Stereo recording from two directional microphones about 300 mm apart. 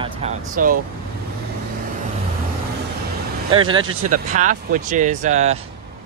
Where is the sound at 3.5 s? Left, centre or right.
Centre.